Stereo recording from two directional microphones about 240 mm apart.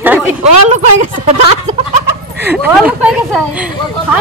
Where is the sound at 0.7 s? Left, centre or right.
Right.